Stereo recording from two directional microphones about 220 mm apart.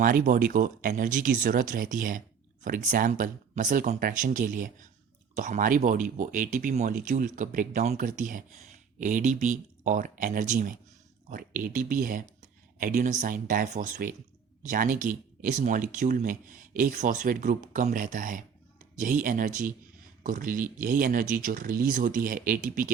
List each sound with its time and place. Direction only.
0.0 s speech: 40° right (ahead or behind)